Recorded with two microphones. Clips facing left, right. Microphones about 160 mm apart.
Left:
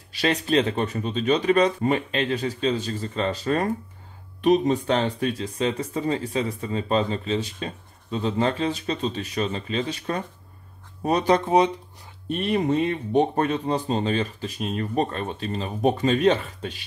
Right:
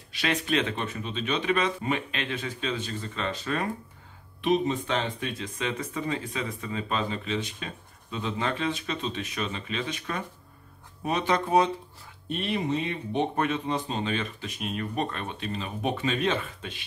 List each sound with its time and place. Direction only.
0.1 s speech: 35° left (ahead or behind)
11.4 s speech: 20° left (ahead or behind)
12.3 s speech: 45° left (ahead or behind)